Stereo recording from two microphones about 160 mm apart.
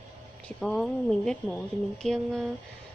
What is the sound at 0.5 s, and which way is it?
Speech, centre (ahead or behind).